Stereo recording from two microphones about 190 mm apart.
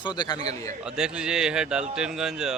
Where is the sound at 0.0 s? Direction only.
20° left (ahead or behind).